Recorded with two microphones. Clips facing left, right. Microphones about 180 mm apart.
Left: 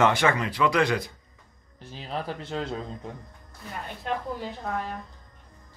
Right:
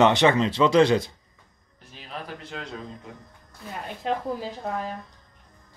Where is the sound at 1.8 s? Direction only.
30° left (ahead or behind).